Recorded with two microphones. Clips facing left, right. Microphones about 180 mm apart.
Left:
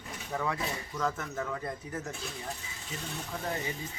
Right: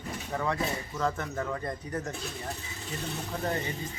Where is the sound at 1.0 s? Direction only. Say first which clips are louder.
Right 2 dB; centre (ahead or behind).